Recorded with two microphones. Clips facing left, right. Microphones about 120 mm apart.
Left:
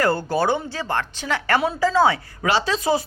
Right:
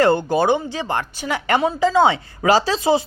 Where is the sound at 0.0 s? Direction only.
20° right (ahead or behind).